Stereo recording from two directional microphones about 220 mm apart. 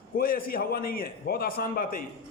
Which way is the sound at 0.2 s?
40° left (ahead or behind).